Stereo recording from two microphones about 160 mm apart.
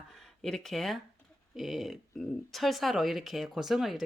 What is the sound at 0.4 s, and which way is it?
Speech, 5° left (ahead or behind).